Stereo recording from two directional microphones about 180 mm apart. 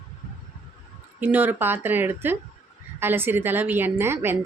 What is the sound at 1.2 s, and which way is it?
A woman's voice, 10° right (ahead or behind).